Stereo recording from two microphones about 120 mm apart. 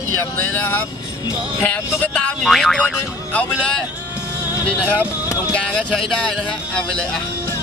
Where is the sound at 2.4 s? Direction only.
5° left (ahead or behind).